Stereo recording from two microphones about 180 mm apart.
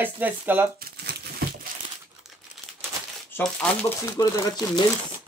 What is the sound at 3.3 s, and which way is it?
Speech, 10° left (ahead or behind).